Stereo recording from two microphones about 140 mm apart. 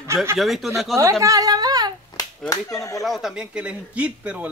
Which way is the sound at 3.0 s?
Centre (ahead or behind).